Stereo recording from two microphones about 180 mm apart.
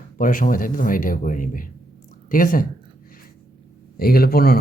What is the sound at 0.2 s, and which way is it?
Speech, 50° left (ahead or behind).